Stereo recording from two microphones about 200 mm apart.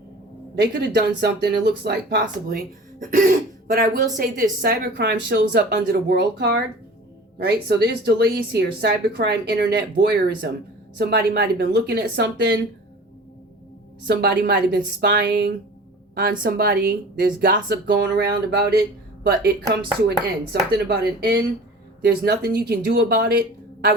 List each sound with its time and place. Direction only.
0.6 s speech: 55° right (ahead or behind)
14.1 s speech: 50° right (ahead or behind)